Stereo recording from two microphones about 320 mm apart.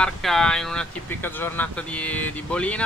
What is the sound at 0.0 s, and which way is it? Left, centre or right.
Speech, centre.